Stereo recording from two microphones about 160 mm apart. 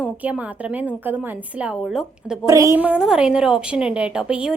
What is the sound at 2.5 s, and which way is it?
Speech, 20° right (ahead or behind).